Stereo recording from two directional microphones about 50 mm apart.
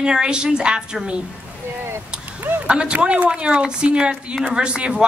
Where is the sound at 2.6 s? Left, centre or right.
Right.